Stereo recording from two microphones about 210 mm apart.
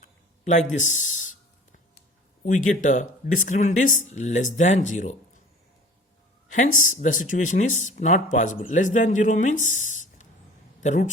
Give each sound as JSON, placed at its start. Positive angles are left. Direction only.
{"t": 0.0, "sound": "a sound", "side_deg": 35}
{"t": 2.4, "sound": "speech", "side_deg": 40}
{"t": 6.7, "sound": "speech", "side_deg": 35}